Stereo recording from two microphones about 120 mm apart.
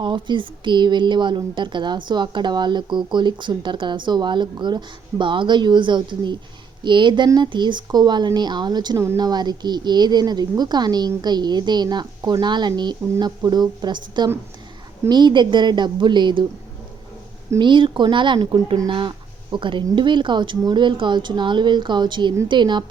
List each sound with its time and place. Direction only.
0.0 s speech: 40° right (ahead or behind)
17.6 s speech: 40° right (ahead or behind)